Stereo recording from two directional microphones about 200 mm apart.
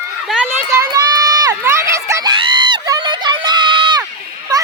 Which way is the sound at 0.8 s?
20° right (ahead or behind).